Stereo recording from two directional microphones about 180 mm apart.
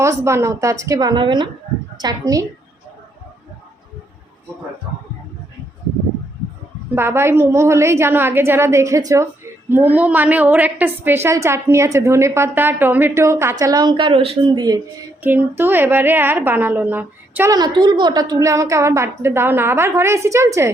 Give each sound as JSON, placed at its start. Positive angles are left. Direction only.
{"t": 0.3, "sound": "a woman's voice", "side_deg": -15}
{"t": 6.9, "sound": "a woman's voice", "side_deg": -15}
{"t": 15.2, "sound": "a woman's voice", "side_deg": -10}
{"t": 17.5, "sound": "a woman's voice", "side_deg": -25}